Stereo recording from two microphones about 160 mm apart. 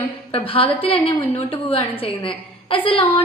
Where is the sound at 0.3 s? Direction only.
35° left (ahead or behind).